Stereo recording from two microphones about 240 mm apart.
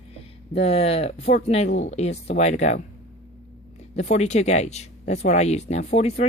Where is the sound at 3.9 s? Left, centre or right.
Left.